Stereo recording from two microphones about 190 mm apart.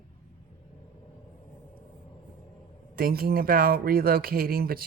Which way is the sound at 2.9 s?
50° right (ahead or behind).